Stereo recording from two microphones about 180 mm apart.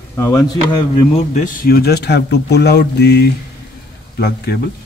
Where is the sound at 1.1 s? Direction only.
40° left (ahead or behind); by 3.2 s 65° left (ahead or behind).